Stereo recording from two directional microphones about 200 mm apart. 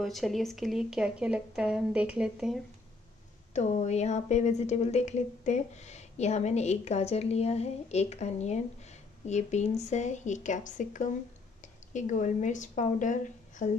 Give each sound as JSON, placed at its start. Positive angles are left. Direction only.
{"t": 0.0, "sound": "speech", "side_deg": 0}
{"t": 3.5, "sound": "a woman's voice", "side_deg": 35}